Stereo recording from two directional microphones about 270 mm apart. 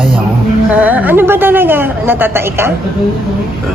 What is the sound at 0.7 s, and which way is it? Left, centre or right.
A woman's voice, centre.